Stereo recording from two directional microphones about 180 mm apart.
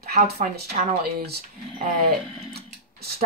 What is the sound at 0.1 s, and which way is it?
Speech, 50° right (ahead or behind).